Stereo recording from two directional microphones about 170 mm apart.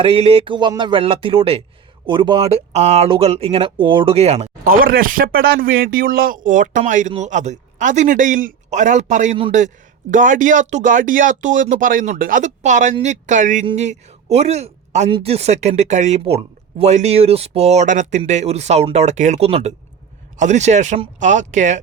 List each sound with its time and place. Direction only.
0.0 s speech: 35° right (ahead or behind)
4.6 s speech: 60° right (ahead or behind)